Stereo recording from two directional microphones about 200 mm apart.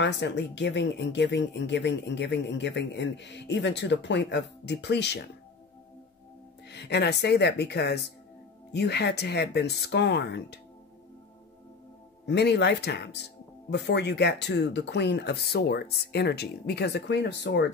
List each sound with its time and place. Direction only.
0.0 s speech: 60° left (ahead or behind)
6.7 s speech: 55° left (ahead or behind)
12.3 s speech: 55° left (ahead or behind)